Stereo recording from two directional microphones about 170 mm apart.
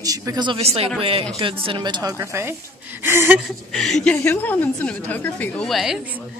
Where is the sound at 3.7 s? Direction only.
Centre (ahead or behind).